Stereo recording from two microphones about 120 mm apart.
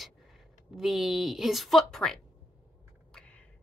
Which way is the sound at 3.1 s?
10° left (ahead or behind).